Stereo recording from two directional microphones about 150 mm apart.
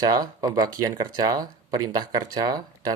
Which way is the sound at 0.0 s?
25° right (ahead or behind).